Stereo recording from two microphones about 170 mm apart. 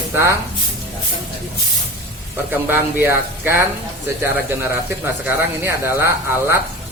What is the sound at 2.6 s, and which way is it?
Speech, 10° right (ahead or behind).